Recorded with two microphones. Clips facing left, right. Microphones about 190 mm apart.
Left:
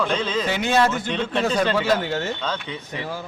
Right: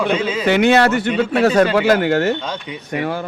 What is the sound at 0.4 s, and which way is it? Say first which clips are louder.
Speech: right 9 dB; 65° right (ahead or behind).